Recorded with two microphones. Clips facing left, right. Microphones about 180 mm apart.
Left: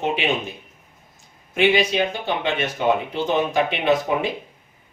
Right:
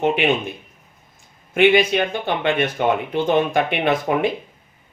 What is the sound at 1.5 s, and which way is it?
Speech, 55° right (ahead or behind).